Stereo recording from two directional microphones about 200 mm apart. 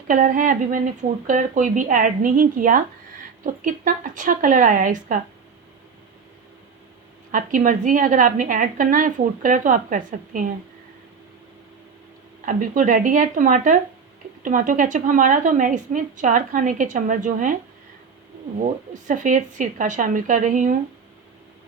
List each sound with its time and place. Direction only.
0.1 s a woman's voice: 40° right (ahead or behind)
7.3 s a woman's voice: 40° right (ahead or behind)
12.5 s a woman's voice: 40° right (ahead or behind)
18.6 s a woman's voice: 40° right (ahead or behind)